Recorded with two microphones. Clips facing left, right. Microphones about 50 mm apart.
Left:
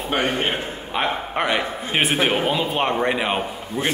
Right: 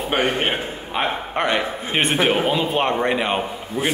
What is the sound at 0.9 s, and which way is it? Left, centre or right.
A man's voice, centre.